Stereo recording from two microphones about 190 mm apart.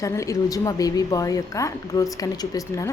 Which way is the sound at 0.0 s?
15° left (ahead or behind).